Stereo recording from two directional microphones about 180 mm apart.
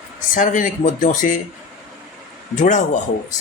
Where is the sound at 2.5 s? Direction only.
45° left (ahead or behind).